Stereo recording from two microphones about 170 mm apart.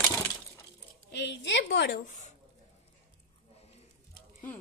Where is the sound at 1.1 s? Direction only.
85° left.